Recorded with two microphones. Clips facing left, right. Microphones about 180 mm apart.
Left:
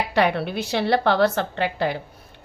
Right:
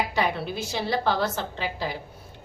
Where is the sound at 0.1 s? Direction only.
65° left (ahead or behind).